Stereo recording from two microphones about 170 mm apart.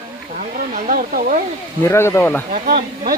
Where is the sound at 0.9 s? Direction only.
55° right (ahead or behind).